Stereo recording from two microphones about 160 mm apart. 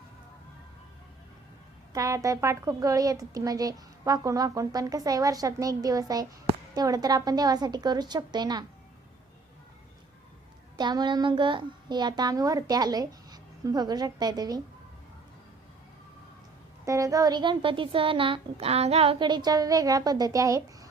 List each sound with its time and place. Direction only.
1.9 s a woman's voice: 20° right (ahead or behind)
10.8 s a woman's voice: 25° right (ahead or behind)
16.8 s a woman's voice: 20° right (ahead or behind)